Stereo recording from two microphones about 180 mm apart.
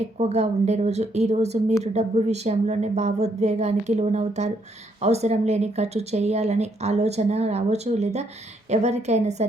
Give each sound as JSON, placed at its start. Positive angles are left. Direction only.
{"t": 0.2, "sound": "speech", "side_deg": -35}